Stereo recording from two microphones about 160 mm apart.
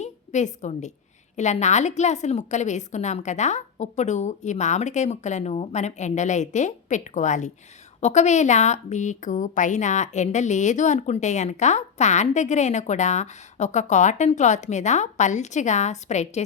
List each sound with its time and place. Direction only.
0.0 s a woman's voice: 45° left (ahead or behind)